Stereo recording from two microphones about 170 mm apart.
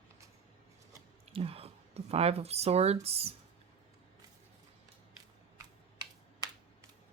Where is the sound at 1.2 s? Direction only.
35° right (ahead or behind).